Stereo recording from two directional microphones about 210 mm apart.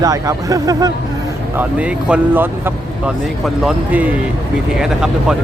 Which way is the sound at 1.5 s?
5° right (ahead or behind).